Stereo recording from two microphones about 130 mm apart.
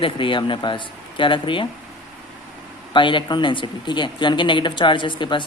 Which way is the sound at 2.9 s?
40° left (ahead or behind).